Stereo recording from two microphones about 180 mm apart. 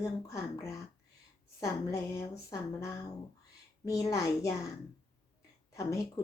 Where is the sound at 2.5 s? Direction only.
20° left (ahead or behind).